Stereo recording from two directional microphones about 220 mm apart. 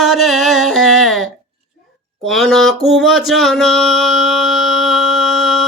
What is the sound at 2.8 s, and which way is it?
Music, centre (ahead or behind).